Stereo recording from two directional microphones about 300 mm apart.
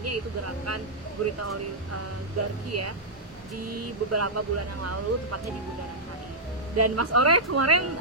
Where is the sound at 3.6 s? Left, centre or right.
Right.